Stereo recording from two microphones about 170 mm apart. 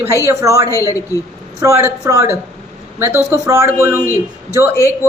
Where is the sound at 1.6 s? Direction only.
15° right (ahead or behind).